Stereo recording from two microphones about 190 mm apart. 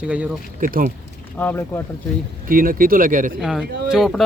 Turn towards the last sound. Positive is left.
turn(degrees=0)  # may be behind; listen again after turning